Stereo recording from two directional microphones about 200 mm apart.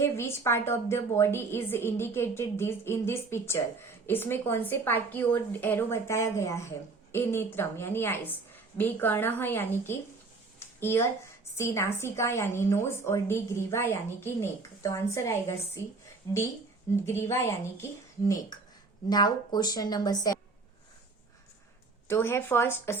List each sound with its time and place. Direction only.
0.0 s a woman's voice: 15° left (ahead or behind)
17.1 s a woman's voice: 15° left (ahead or behind)
19.0 s a woman's voice: 20° left (ahead or behind)
22.0 s a woman's voice: 10° left (ahead or behind)